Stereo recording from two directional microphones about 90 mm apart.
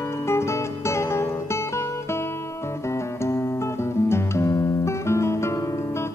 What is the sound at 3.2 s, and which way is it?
Guitar, 30° left (ahead or behind).